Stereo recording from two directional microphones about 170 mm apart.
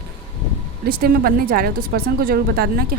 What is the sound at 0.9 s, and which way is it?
A woman's voice, 60° right (ahead or behind).